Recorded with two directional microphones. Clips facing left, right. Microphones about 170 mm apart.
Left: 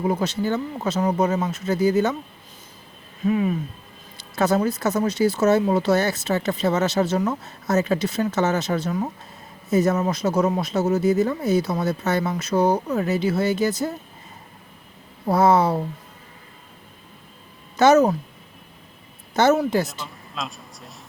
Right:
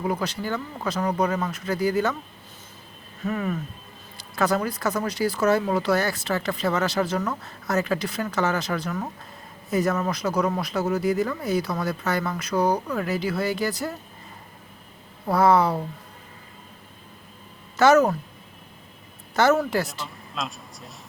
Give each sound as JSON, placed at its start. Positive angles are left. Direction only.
{"t": 0.0, "sound": "speech", "side_deg": 25}
{"t": 3.2, "sound": "speech", "side_deg": 15}
{"t": 15.3, "sound": "speech", "side_deg": 20}
{"t": 17.7, "sound": "speech", "side_deg": 20}
{"t": 19.3, "sound": "speech", "side_deg": 20}
{"t": 20.3, "sound": "speech", "side_deg": 0}